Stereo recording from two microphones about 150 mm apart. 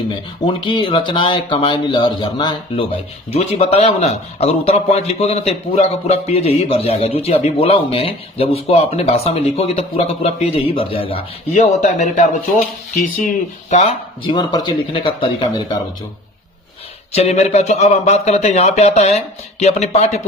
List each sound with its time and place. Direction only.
0.4 s a man's voice: 35° left (ahead or behind)
11.8 s speech: 55° left (ahead or behind)
13.7 s a man's voice: 45° left (ahead or behind)
17.1 s speech: 45° left (ahead or behind)